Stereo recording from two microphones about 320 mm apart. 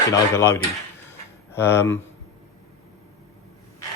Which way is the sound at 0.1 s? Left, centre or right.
Centre.